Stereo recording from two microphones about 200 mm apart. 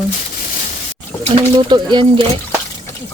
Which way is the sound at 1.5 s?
25° right (ahead or behind).